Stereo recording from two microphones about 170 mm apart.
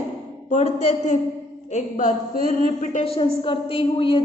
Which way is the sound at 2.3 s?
40° right (ahead or behind).